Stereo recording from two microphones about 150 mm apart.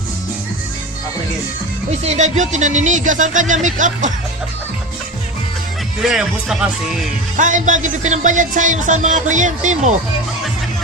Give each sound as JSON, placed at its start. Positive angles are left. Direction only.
{"t": 2.0, "sound": "music", "side_deg": -50}
{"t": 6.0, "sound": "speech", "side_deg": -5}
{"t": 7.3, "sound": "music", "side_deg": -55}